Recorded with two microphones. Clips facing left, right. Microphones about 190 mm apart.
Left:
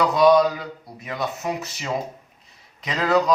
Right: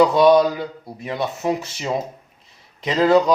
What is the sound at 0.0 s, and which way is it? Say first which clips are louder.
Speech: right 3 dB; 25° right (ahead or behind).